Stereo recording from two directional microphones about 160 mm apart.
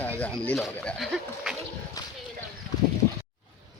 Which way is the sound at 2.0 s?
25° left (ahead or behind).